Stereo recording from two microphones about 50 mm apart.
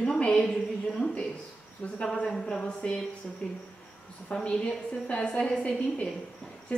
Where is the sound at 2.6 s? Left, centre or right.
Left.